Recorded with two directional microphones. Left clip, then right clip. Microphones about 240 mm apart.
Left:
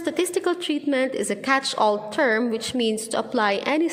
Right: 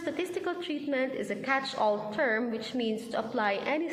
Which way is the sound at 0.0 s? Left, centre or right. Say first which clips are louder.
Left 9 dB; left.